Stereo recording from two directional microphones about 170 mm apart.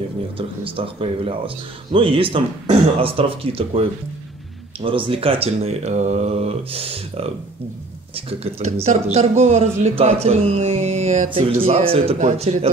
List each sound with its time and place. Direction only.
0.4 s speech: 30° right (ahead or behind)
8.3 s speech: 35° right (ahead or behind)